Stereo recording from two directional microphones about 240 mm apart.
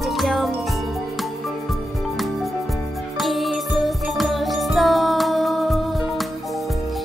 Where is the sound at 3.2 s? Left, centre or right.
Centre.